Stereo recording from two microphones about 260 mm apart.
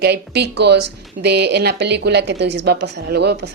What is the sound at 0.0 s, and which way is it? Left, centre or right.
A woman's voice, right.